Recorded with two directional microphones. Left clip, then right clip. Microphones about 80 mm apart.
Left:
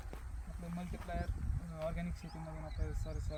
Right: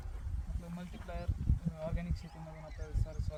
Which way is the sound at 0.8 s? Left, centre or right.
Right.